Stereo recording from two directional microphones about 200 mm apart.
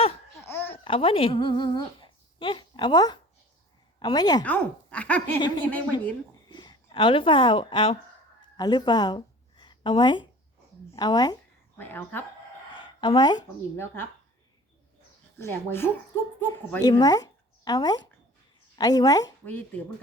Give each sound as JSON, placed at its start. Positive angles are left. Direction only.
{"t": 0.4, "sound": "babbling", "side_deg": 10}
{"t": 0.7, "sound": "speech", "side_deg": 25}
{"t": 4.4, "sound": "a woman's voice", "side_deg": 5}
{"t": 6.5, "sound": "speech", "side_deg": 20}
{"t": 8.5, "sound": "a sound", "side_deg": 20}
{"t": 10.9, "sound": "a woman's voice", "side_deg": 20}
{"t": 13.0, "sound": "speech", "side_deg": 20}
{"t": 15.4, "sound": "a woman's voice", "side_deg": 10}